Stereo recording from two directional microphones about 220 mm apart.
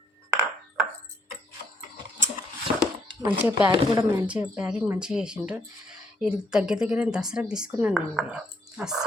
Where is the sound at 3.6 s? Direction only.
20° right (ahead or behind).